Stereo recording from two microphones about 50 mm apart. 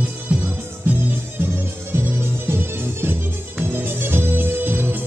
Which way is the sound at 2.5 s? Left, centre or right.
Right.